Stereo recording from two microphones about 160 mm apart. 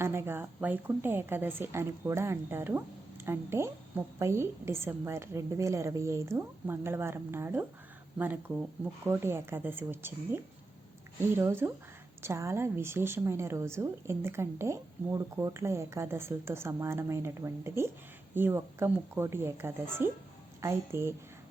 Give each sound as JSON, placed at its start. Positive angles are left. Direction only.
{"t": 0.0, "sound": "a woman's voice", "side_deg": -15}